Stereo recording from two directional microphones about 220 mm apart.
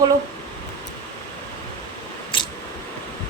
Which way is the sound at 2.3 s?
25° left (ahead or behind).